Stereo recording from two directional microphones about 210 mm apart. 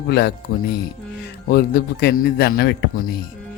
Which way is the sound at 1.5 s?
50° left (ahead or behind).